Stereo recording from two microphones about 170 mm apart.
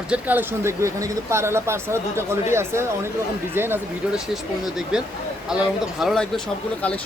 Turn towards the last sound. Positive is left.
turn(degrees=0)  # may be behind; listen again after turning